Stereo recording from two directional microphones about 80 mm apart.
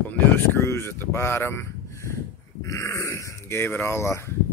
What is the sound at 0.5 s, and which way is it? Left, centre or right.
Speech, left.